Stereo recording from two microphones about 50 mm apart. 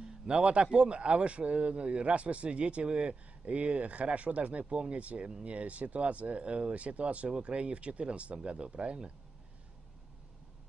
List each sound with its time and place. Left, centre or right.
0.3 s a man's voice: right